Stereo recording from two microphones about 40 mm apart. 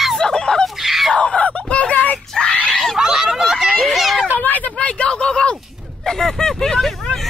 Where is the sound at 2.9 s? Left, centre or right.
Centre.